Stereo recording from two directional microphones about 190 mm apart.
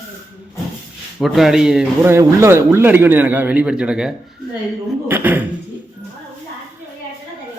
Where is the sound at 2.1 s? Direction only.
15° right (ahead or behind).